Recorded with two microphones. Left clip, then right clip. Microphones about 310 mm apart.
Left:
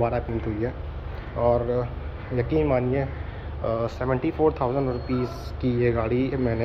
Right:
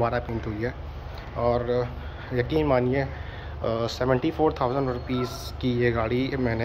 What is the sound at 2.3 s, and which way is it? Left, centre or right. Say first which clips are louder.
Speech: even; centre.